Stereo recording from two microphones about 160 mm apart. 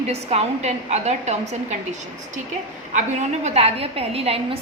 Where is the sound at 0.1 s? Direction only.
40° right (ahead or behind).